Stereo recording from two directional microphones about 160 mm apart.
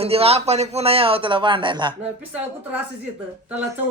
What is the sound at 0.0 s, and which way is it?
A man's voice, 40° right (ahead or behind).